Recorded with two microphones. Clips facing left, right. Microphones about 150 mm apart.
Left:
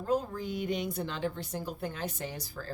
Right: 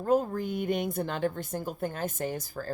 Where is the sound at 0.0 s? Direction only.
50° right (ahead or behind).